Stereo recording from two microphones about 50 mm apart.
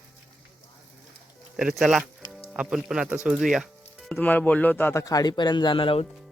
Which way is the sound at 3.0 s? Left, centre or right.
Right.